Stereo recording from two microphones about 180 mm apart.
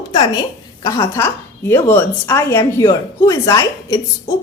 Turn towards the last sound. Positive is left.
turn(degrees=20)  # may be behind; listen again after turning